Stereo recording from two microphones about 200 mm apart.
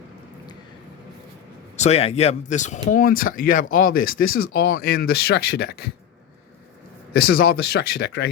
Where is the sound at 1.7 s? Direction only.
35° left (ahead or behind); by 5.9 s 50° left (ahead or behind).